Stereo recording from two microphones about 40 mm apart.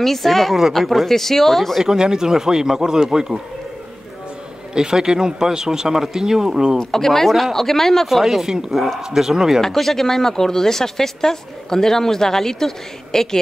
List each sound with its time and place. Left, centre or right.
0.0 s speech: centre
1.8 s speech: centre
4.7 s speech: centre
6.8 s speech: centre
8.2 s speech: centre
9.6 s speech: centre